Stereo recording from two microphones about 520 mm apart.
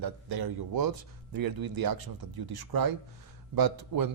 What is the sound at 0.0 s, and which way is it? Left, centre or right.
Speech, right.